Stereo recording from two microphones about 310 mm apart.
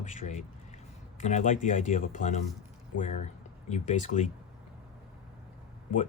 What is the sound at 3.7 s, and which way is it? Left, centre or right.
Speech, left.